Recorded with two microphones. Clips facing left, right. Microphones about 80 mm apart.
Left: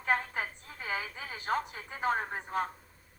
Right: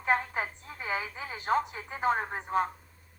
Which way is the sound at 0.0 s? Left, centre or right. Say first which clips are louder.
Right 3 dB; right.